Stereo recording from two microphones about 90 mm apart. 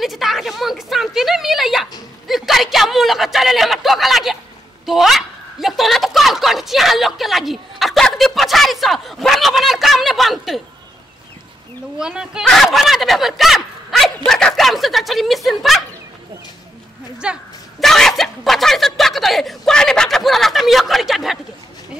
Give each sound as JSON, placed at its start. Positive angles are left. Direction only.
{"t": 0.0, "sound": "a man's voice", "side_deg": 0}
{"t": 4.8, "sound": "a sound", "side_deg": 0}
{"t": 12.0, "sound": "speech", "side_deg": -10}
{"t": 12.4, "sound": "a sound", "side_deg": 0}
{"t": 17.2, "sound": "speech", "side_deg": -10}
{"t": 17.7, "sound": "speech", "side_deg": 5}